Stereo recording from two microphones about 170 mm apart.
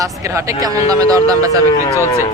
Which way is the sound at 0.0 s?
20° right (ahead or behind).